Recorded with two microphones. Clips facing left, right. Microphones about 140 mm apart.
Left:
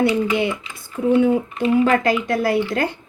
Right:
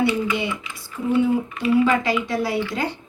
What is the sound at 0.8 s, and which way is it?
Speech, 55° left (ahead or behind).